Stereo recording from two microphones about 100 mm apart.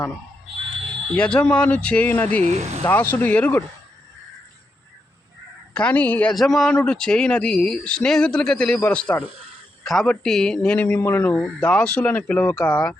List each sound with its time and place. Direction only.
1.1 s speech: 10° left (ahead or behind)
2.5 s speech: 90° right
2.8 s speech: 20° left (ahead or behind)
5.7 s speech: 10° left (ahead or behind)
6.3 s a man's voice: 5° left (ahead or behind); by 11.3 s 20° left (ahead or behind)
11.3 s speech: 10° left (ahead or behind)